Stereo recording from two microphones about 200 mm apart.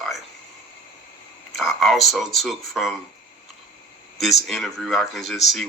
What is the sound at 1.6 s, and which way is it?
Speech, centre (ahead or behind).